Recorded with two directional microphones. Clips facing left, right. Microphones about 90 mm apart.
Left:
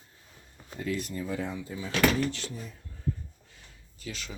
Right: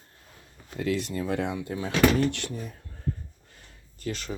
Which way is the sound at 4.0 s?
45° right (ahead or behind).